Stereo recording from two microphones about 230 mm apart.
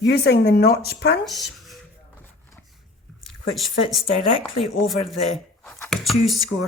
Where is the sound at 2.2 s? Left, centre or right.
Centre.